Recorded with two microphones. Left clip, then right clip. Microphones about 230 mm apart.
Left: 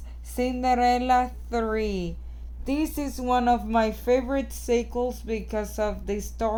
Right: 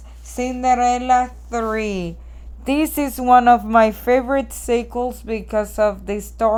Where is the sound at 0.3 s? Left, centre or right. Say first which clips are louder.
Right 6 dB; centre.